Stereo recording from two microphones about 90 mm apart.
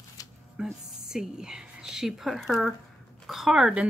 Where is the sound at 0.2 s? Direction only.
40° left (ahead or behind).